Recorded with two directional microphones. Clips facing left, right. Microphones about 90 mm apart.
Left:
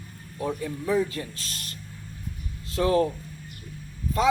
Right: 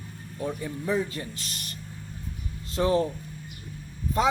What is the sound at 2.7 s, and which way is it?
Speech, 25° right (ahead or behind).